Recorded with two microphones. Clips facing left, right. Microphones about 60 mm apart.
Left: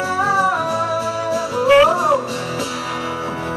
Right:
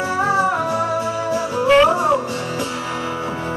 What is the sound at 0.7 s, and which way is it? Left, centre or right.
Music, right.